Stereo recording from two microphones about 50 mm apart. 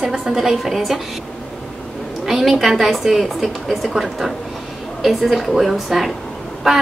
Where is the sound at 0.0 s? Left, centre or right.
Centre.